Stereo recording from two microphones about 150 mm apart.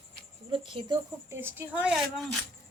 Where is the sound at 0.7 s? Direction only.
35° right (ahead or behind).